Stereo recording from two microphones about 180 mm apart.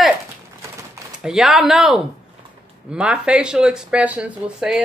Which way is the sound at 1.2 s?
5° right (ahead or behind).